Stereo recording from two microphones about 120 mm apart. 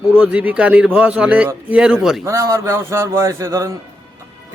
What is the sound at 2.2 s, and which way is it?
A man's voice, 25° right (ahead or behind).